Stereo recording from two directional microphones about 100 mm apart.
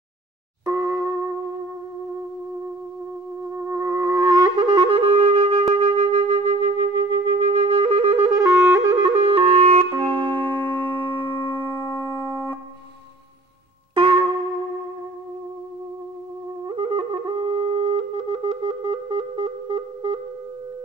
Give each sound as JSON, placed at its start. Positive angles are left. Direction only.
{"t": 0.7, "sound": "a sound", "side_deg": -25}
{"t": 3.5, "sound": "music", "side_deg": -30}
{"t": 8.5, "sound": "wind instrument", "side_deg": -25}
{"t": 9.1, "sound": "music", "side_deg": -70}
{"t": 9.9, "sound": "music", "side_deg": 15}
{"t": 13.9, "sound": "music", "side_deg": -55}
{"t": 16.6, "sound": "flute", "side_deg": -70}